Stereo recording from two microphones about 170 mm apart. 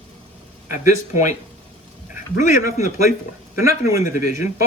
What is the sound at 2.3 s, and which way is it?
Speech, 50° left (ahead or behind).